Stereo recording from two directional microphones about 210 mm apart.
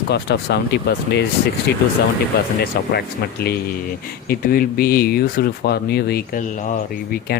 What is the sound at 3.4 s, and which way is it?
Speech, 50° left (ahead or behind).